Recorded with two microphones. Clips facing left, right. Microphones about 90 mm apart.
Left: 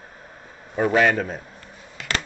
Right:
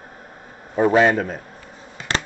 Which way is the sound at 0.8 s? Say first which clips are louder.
Right 3 dB; 25° right (ahead or behind).